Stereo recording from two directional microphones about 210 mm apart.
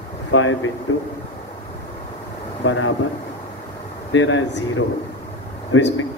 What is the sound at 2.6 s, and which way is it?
Speech, 65° left (ahead or behind).